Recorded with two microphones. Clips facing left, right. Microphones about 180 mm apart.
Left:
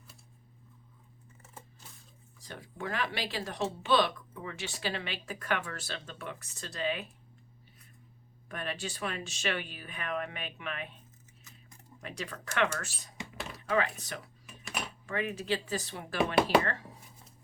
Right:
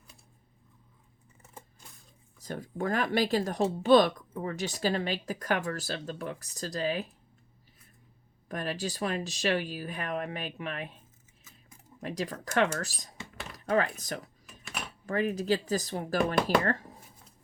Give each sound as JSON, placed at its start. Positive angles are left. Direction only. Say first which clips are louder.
{"t": 2.4, "sound": "speech", "louder": "right 7 dB", "side_deg": -45}
{"t": 8.4, "sound": "speech", "louder": "right 4 dB", "side_deg": -35}
{"t": 12.0, "sound": "speech", "louder": "right 6 dB", "side_deg": -40}
{"t": 13.3, "sound": "typing", "louder": "left 2 dB", "side_deg": 0}
{"t": 13.7, "sound": "speech", "louder": "right 3 dB", "side_deg": -40}